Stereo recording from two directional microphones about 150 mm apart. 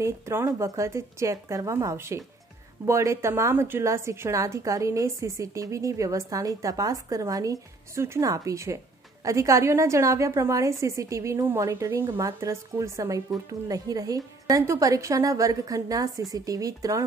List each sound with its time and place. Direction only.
0.0 s a woman's voice: 15° right (ahead or behind)